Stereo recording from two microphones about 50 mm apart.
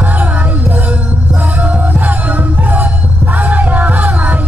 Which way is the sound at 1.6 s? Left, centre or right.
Right.